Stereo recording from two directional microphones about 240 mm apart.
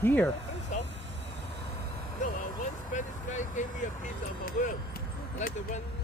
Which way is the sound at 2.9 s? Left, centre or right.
Left.